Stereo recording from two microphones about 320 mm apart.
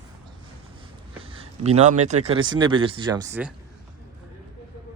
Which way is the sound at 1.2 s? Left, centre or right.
Centre.